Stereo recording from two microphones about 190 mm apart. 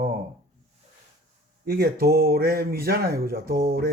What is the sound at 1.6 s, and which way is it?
Speech, 55° right (ahead or behind).